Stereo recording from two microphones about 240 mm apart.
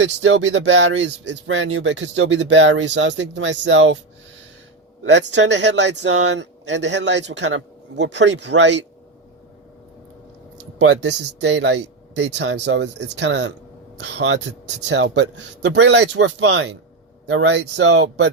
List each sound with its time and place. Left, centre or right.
0.0 s speech: right
5.0 s speech: right
10.8 s speech: right